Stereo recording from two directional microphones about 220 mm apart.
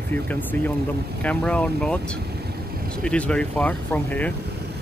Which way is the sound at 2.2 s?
45° right (ahead or behind).